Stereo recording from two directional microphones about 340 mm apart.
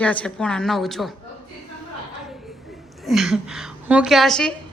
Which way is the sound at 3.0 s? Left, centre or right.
Centre.